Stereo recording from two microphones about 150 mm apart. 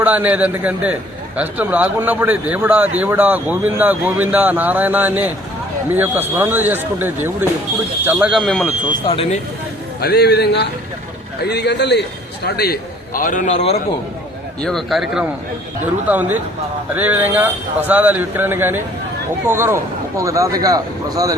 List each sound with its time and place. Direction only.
0.0 s speech: 10° right (ahead or behind)
9.0 s speech: 40° left (ahead or behind)
10.0 s a man's voice: 90° left
12.5 s a man's voice: 90° left; by 13.5 s 65° left (ahead or behind)
13.5 s a man's voice: 45° left (ahead or behind)
14.6 s speech: 5° left (ahead or behind); by 21.3 s 25° right (ahead or behind)